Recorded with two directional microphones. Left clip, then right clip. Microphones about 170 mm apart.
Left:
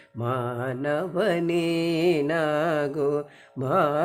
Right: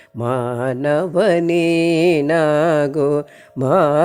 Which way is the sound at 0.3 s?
40° right (ahead or behind).